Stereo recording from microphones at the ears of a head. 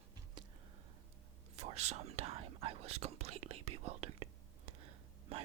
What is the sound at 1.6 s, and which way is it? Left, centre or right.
Speech, right.